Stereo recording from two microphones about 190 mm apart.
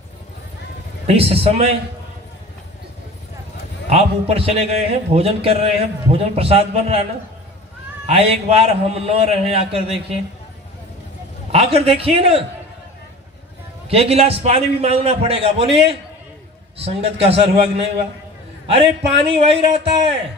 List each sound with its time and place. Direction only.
1.0 s a man's voice: 30° right (ahead or behind)
3.8 s a man's voice: 30° right (ahead or behind)
8.1 s a man's voice: 30° right (ahead or behind)
11.5 s a man's voice: 30° right (ahead or behind)
13.8 s a man's voice: 30° right (ahead or behind)
18.7 s a man's voice: 30° right (ahead or behind)